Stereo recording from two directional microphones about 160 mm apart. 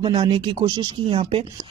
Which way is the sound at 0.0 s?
35° right (ahead or behind).